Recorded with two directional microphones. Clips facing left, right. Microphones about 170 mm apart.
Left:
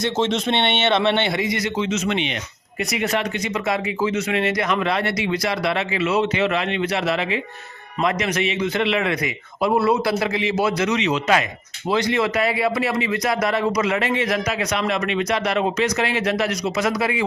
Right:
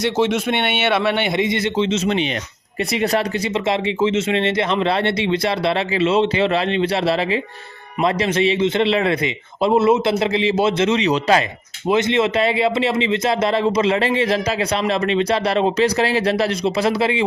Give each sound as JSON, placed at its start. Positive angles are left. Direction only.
{"t": 0.0, "sound": "speech", "side_deg": -10}
{"t": 11.9, "sound": "speech", "side_deg": -20}